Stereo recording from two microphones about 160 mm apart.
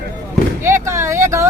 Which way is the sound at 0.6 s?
15° right (ahead or behind).